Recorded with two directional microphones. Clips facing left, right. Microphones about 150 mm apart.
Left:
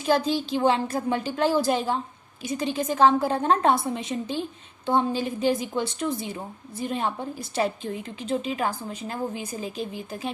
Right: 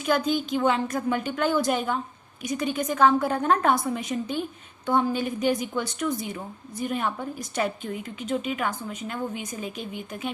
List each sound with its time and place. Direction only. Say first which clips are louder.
0.0 s a woman's voice: left 1 dB; 30° left (ahead or behind)